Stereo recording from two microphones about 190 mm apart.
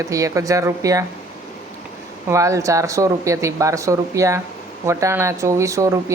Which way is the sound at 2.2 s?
15° right (ahead or behind).